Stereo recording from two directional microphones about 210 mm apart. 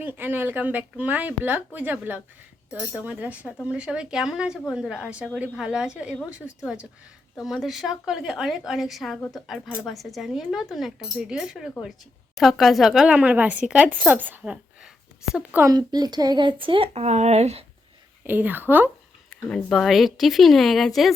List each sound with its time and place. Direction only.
0.0 s a woman's voice: 10° right (ahead or behind); by 17.7 s 30° right (ahead or behind)
18.2 s speech: 10° right (ahead or behind)
19.3 s a woman's voice: 5° left (ahead or behind)